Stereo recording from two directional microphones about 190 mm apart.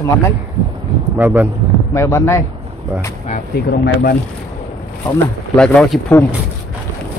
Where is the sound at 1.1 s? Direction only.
10° right (ahead or behind).